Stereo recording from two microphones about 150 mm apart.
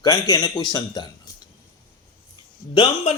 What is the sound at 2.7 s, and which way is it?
Speech, 35° left (ahead or behind).